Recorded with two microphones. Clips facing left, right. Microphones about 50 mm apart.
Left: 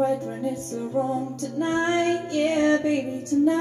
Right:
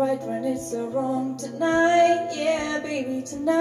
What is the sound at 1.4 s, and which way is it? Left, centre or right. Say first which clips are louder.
Female singing: right 5 dB; right.